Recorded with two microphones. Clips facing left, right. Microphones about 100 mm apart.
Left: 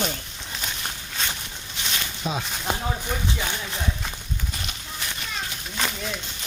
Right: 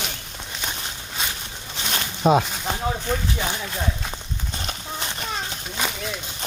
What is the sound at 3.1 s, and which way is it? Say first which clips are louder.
Speech: right 4 dB; 5° left (ahead or behind).